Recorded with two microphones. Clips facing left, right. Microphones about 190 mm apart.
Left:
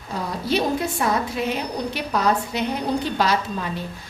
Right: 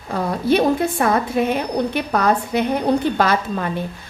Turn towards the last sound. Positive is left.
turn(degrees=-55)  # may be behind; listen again after turning